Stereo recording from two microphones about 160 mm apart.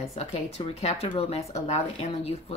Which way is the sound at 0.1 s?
40° left (ahead or behind).